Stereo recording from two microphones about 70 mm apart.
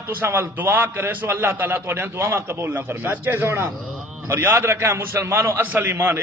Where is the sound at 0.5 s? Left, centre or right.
Right.